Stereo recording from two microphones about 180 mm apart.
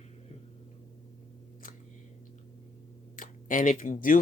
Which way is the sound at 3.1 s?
50° left (ahead or behind).